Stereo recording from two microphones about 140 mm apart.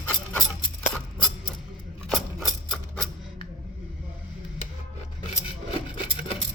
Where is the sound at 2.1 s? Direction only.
Centre (ahead or behind).